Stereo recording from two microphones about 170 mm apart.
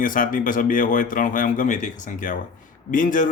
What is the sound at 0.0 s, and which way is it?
A man's voice, 50° left (ahead or behind).